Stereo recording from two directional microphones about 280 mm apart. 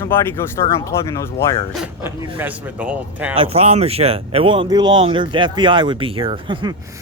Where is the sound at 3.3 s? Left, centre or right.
Right.